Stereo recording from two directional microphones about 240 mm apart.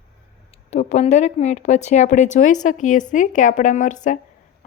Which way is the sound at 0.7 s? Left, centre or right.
Left.